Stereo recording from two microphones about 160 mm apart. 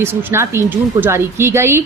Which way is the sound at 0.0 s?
15° right (ahead or behind).